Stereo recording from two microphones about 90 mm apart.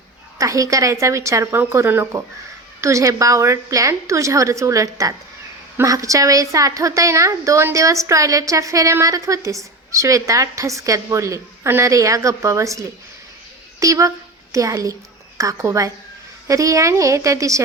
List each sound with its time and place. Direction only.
0.3 s a woman's voice: 35° right (ahead or behind)